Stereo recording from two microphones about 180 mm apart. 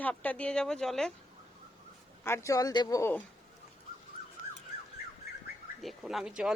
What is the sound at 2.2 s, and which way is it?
Speech, 15° left (ahead or behind).